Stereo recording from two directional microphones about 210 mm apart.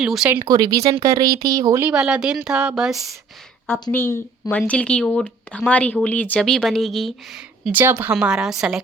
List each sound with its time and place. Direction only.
0.0 s speech: 5° right (ahead or behind)
0.3 s speech: 20° right (ahead or behind); by 3.0 s centre (ahead or behind)
3.7 s speech: 10° left (ahead or behind)